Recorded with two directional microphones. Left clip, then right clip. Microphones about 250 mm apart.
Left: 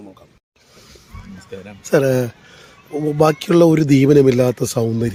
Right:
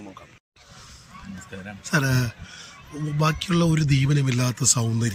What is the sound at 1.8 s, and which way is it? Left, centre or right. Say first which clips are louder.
Speech: left 10 dB; centre.